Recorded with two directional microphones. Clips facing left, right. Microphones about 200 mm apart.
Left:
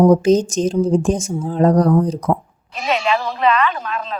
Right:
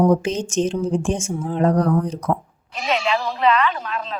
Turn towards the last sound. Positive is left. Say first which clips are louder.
# left 2 dB
turn(degrees=50)  # may be behind; listen again after turning